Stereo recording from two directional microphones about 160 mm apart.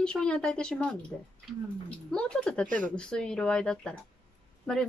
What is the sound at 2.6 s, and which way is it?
Speech, 55° right (ahead or behind).